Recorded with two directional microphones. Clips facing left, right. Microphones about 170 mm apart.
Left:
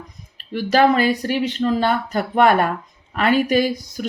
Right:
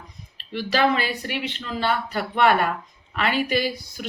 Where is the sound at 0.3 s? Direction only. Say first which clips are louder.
Left 6 dB; 45° left (ahead or behind).